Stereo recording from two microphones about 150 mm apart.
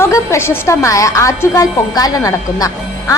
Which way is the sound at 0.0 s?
20° left (ahead or behind).